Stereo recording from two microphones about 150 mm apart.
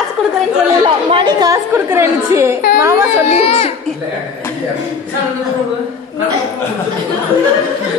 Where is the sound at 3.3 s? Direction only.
45° left (ahead or behind).